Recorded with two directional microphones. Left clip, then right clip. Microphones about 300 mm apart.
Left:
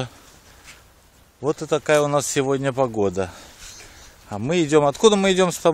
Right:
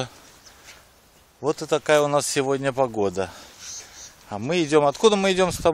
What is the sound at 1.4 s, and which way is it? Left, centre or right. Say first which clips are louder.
Speech: left 1 dB; centre.